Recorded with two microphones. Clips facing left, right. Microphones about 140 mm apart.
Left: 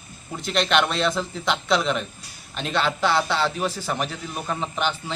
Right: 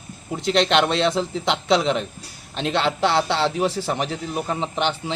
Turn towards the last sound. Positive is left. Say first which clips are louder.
# right 2 dB
turn(degrees=-25)  # may be behind; listen again after turning